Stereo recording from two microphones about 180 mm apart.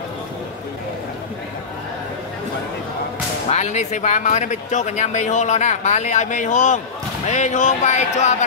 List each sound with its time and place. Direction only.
3.4 s speech: 40° left (ahead or behind)